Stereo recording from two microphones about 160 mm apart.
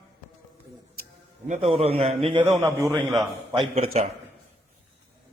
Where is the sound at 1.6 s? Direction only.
35° right (ahead or behind).